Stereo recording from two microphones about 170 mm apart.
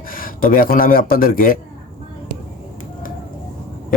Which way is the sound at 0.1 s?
55° left (ahead or behind).